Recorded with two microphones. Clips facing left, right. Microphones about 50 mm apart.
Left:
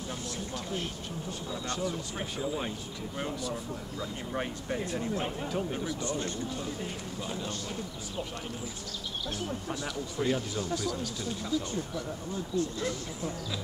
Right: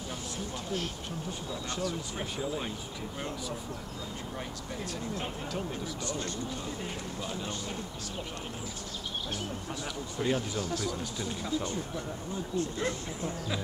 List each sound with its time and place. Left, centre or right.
1.8 s speech: centre
4.4 s speech: left
5.1 s speech: centre
10.2 s speech: centre
10.9 s speech: centre
12.5 s speech: right